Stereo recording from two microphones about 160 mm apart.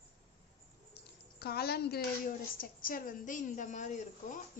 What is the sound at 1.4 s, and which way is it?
Speech, 75° left (ahead or behind).